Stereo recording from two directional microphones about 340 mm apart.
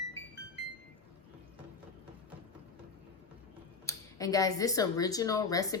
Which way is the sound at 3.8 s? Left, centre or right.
Centre.